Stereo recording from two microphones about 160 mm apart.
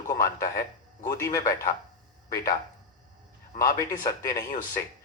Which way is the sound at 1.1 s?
20° left (ahead or behind).